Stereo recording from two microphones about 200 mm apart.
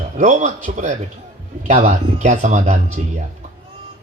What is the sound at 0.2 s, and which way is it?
A man's voice, 40° right (ahead or behind).